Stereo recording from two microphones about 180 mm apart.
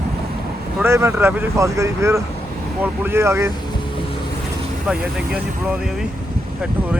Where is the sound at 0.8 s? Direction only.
15° right (ahead or behind).